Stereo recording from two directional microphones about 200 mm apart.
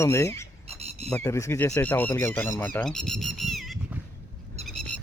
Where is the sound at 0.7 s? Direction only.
30° right (ahead or behind).